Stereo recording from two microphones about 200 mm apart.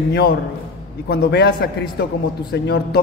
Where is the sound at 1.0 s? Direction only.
55° left (ahead or behind).